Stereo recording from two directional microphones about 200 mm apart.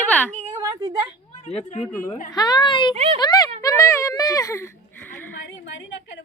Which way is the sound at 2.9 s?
30° right (ahead or behind).